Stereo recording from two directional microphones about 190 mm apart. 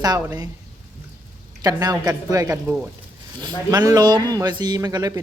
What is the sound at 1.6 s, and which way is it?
Speech, 20° right (ahead or behind).